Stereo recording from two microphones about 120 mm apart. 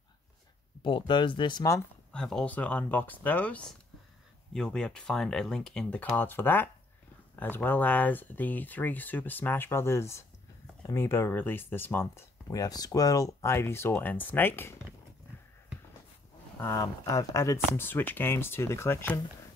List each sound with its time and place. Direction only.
0.8 s speech: 45° left (ahead or behind)
2.1 s speech: 5° left (ahead or behind)
16.5 s speech: 25° left (ahead or behind)